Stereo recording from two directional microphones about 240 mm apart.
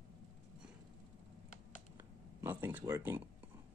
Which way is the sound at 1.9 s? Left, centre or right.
Centre.